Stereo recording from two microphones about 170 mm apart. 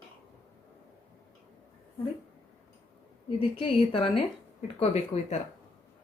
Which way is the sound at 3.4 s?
30° left (ahead or behind).